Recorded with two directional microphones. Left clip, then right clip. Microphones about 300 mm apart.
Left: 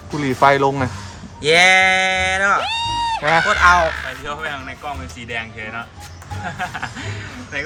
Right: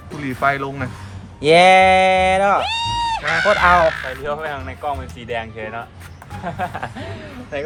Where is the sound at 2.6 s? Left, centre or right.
Centre.